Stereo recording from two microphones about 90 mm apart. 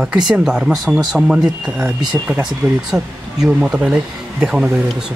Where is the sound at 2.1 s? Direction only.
40° right (ahead or behind).